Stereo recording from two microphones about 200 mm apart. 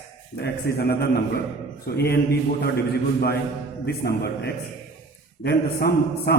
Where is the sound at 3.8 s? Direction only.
50° left (ahead or behind).